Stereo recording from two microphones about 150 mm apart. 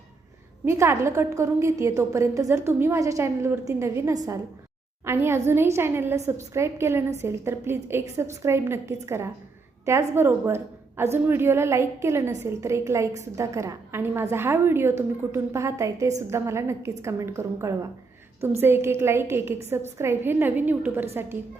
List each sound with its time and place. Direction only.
0.6 s a woman's voice: 20° right (ahead or behind)